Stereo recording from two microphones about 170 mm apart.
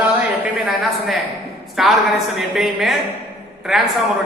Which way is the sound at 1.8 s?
Centre (ahead or behind).